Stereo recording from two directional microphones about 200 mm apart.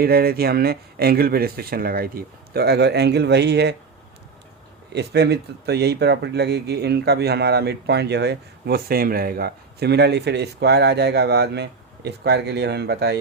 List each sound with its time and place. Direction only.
0.0 s speech: 50° right (ahead or behind)
4.9 s speech: 55° right (ahead or behind)